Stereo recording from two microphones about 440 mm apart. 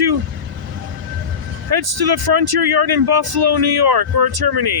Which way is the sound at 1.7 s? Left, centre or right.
Right.